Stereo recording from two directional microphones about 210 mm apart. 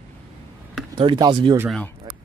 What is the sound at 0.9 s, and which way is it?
Speech, 20° right (ahead or behind).